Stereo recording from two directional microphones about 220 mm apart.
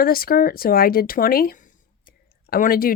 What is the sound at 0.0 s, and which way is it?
A woman's voice, 40° left (ahead or behind).